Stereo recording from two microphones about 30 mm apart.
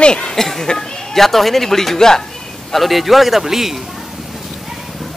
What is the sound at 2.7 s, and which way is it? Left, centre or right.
Speech, centre.